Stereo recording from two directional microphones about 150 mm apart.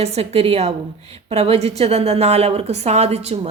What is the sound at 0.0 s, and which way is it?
A woman's voice, 45° right (ahead or behind).